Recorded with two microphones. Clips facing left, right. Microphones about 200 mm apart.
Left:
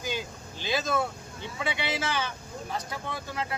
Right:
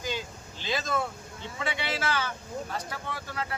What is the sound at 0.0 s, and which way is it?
Vehicle, 15° left (ahead or behind).